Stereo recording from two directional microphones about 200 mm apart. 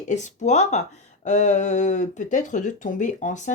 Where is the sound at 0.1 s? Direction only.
35° left (ahead or behind).